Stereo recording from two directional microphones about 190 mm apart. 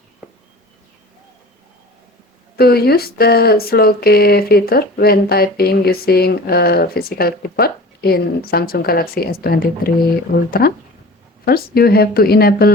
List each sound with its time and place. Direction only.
2.6 s speech: 55° left (ahead or behind)
11.4 s speech: 55° left (ahead or behind)